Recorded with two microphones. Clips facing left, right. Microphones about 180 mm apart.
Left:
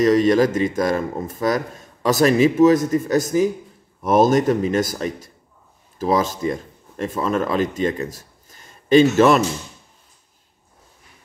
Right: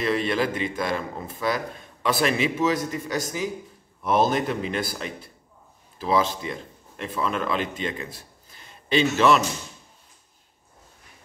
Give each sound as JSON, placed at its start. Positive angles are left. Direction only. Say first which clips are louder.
{"t": 0.0, "sound": "speech", "louder": "left 9 dB", "side_deg": 40}